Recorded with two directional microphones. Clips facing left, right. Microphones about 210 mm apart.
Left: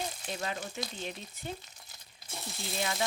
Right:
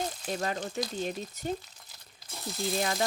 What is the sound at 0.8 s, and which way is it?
Frying, 45° right (ahead or behind).